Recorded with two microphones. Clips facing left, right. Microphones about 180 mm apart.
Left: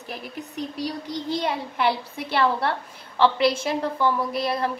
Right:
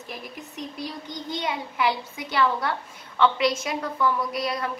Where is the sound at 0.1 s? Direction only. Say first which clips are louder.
Left 4 dB; 35° left (ahead or behind).